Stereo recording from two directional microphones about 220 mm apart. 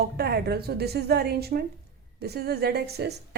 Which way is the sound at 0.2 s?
45° right (ahead or behind).